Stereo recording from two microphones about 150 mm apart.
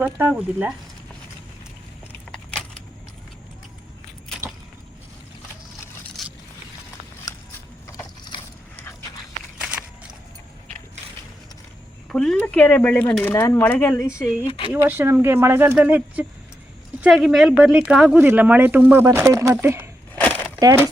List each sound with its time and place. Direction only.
0.0 s speech: 10° right (ahead or behind)
6.2 s vehicle: centre (ahead or behind)
9.6 s a sound: 5° right (ahead or behind)
12.0 s speech: 5° left (ahead or behind)
14.4 s speech: 35° left (ahead or behind)
14.7 s speech: 10° right (ahead or behind)